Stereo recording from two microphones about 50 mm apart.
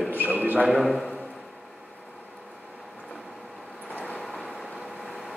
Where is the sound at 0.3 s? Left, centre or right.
Right.